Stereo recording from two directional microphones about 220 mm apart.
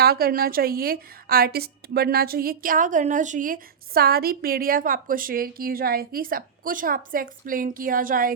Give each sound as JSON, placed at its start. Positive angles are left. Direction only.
{"t": 0.0, "sound": "a woman's voice", "side_deg": -45}